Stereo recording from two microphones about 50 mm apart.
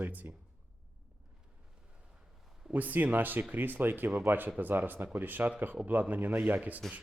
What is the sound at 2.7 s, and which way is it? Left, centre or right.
Speech, right.